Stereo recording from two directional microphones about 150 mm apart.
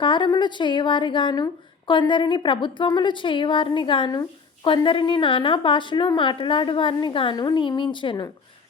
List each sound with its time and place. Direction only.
0.0 s a woman's voice: 30° left (ahead or behind)